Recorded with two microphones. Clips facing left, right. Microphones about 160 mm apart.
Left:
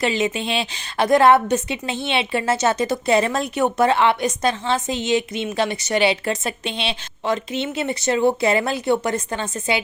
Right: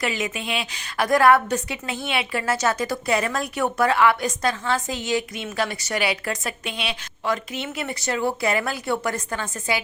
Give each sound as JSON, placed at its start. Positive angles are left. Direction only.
{"t": 0.0, "sound": "a woman's voice", "side_deg": 25}